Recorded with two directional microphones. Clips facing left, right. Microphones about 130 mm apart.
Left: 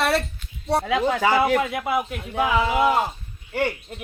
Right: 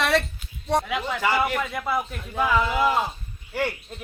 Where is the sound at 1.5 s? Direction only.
15° left (ahead or behind).